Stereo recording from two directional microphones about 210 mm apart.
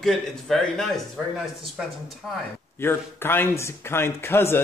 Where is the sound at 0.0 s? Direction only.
Centre (ahead or behind).